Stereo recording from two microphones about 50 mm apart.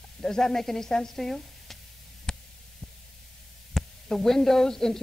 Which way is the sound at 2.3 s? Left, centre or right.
Centre.